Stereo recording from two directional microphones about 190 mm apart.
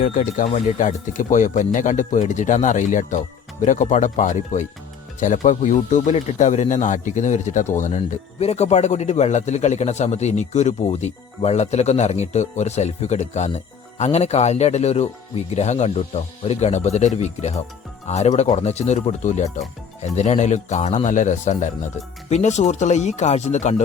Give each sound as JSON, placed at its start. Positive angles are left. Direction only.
{"t": 0.0, "sound": "speech", "side_deg": 40}